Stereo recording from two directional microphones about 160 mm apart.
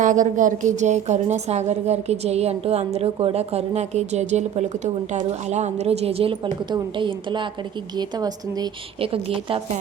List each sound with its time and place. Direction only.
0.0 s a woman's voice: 55° right (ahead or behind); by 9.6 s 35° right (ahead or behind)